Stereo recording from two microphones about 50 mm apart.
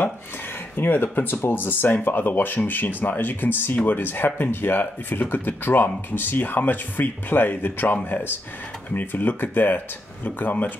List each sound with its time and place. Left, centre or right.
0.7 s speech: left